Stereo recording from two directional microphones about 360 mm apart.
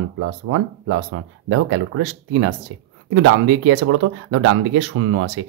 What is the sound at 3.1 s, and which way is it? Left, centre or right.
Speech, right.